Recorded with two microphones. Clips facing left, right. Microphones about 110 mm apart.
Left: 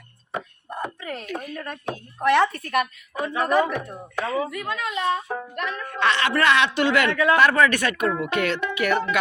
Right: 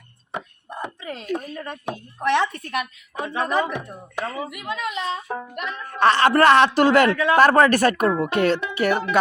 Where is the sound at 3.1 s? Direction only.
20° right (ahead or behind).